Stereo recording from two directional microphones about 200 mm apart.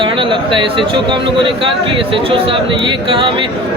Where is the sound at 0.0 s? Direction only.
25° right (ahead or behind).